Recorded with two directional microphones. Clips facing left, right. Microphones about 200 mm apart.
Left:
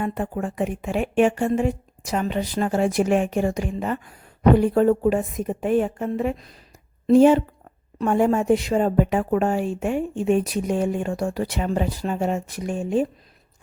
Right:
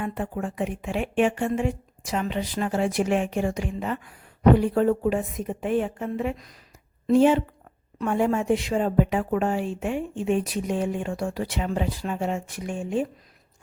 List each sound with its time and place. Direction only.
0.0 s a woman's voice: 45° left (ahead or behind)